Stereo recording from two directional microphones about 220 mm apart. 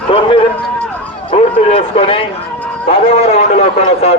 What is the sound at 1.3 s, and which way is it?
A man's voice, 30° left (ahead or behind).